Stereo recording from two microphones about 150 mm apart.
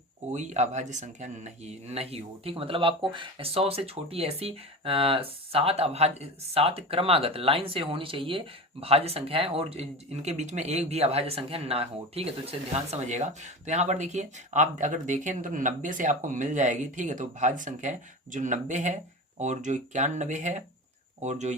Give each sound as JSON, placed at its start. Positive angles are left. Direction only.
{"t": 0.3, "sound": "speech", "side_deg": -50}